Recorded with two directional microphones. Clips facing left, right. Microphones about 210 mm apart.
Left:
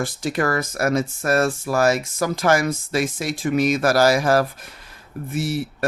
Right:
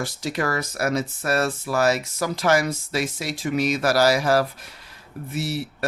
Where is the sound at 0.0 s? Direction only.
50° left (ahead or behind).